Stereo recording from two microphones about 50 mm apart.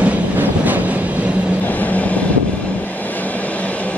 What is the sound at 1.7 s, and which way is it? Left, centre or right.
Train, left.